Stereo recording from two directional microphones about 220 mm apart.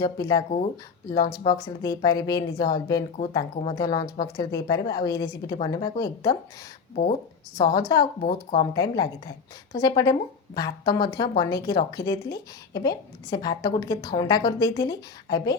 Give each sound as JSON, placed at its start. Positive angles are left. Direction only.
{"t": 0.0, "sound": "speech", "side_deg": 15}
{"t": 7.5, "sound": "speech", "side_deg": 15}
{"t": 8.2, "sound": "speech", "side_deg": 30}
{"t": 8.7, "sound": "speech", "side_deg": 15}